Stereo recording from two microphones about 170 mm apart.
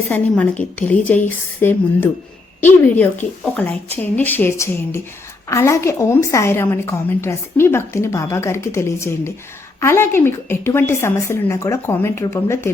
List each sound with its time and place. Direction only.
0.1 s a woman's voice: 10° left (ahead or behind)